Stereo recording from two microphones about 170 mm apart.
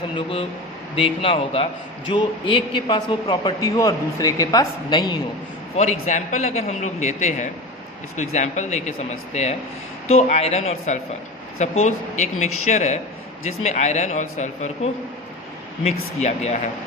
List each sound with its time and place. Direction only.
0.2 s a man's voice: 30° left (ahead or behind)
5.7 s a man's voice: 40° left (ahead or behind)